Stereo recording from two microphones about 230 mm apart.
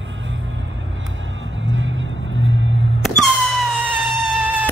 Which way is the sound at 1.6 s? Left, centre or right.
Right.